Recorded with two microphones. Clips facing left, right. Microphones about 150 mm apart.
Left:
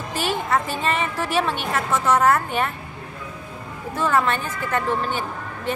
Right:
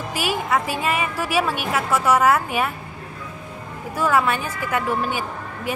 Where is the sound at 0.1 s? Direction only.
10° right (ahead or behind).